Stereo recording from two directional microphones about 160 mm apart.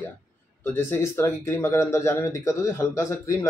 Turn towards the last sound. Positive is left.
turn(degrees=20)  # may be behind; listen again after turning